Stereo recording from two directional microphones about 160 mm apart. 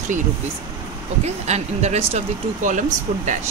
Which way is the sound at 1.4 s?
45° right (ahead or behind).